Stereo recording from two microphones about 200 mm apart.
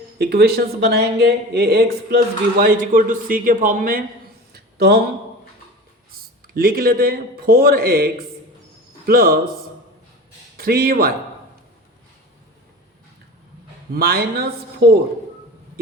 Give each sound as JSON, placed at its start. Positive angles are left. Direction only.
{"t": 0.2, "sound": "speech", "side_deg": -50}
{"t": 4.5, "sound": "a sound", "side_deg": -55}
{"t": 6.1, "sound": "a man's voice", "side_deg": -50}
{"t": 10.6, "sound": "speech", "side_deg": -50}
{"t": 13.9, "sound": "speech", "side_deg": -50}